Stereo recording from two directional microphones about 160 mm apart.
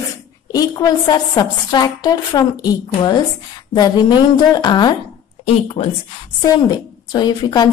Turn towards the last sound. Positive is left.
turn(degrees=25)  # may be behind; listen again after turning